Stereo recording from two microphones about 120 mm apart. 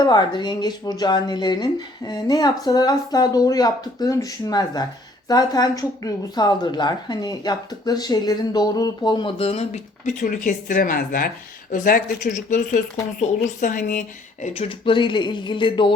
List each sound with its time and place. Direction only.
0.0 s speech: 35° left (ahead or behind)
9.4 s speech: 60° left (ahead or behind); by 10.9 s 90° left
12.2 s a woman's voice: 90° left
14.4 s speech: 60° left (ahead or behind)
14.8 s speech: 40° left (ahead or behind)